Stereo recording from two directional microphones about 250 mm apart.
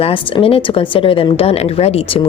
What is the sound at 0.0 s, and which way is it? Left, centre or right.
A woman's voice, left.